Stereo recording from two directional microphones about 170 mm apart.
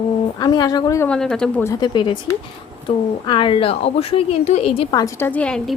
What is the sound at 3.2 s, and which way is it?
A woman's voice, 30° left (ahead or behind).